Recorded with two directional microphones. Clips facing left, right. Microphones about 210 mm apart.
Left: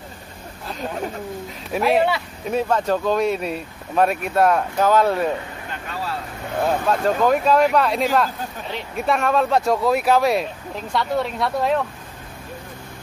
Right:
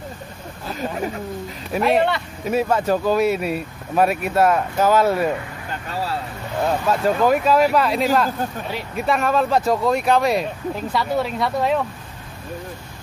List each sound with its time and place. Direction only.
0.7 s speech: 5° right (ahead or behind)
2.4 s speech: 5° right (ahead or behind)
6.6 s speech: 5° right (ahead or behind)